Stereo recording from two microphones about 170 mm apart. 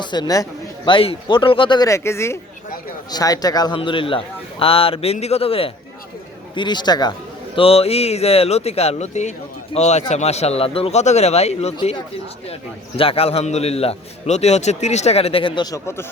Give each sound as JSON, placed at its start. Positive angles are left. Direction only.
{"t": 0.0, "sound": "a man's voice", "side_deg": 25}
{"t": 13.0, "sound": "a man's voice", "side_deg": 35}